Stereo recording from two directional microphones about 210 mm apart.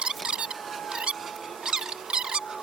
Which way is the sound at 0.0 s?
5° right (ahead or behind).